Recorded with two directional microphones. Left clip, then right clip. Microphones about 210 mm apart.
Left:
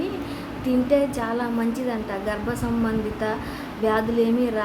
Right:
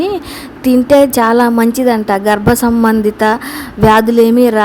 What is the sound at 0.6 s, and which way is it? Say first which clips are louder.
A woman's voice: right 13 dB; 55° right (ahead or behind).